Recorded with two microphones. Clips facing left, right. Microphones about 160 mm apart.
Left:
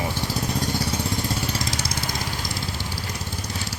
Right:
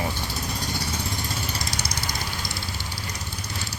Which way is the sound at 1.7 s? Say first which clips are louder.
Left 3 dB; 90° left.